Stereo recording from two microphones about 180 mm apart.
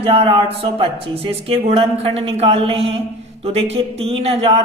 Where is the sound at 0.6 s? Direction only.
30° right (ahead or behind).